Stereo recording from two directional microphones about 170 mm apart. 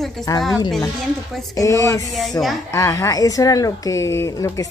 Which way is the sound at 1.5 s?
20° left (ahead or behind).